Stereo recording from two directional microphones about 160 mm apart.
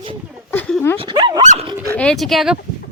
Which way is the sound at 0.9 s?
30° right (ahead or behind).